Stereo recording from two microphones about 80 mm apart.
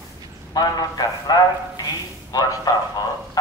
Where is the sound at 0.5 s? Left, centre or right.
Left.